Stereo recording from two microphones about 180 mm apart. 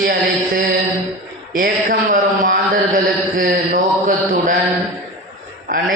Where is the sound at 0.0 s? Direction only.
55° right (ahead or behind).